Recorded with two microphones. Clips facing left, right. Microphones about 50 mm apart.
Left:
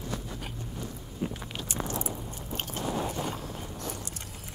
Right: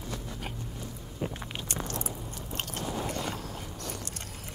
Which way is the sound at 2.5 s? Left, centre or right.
Right.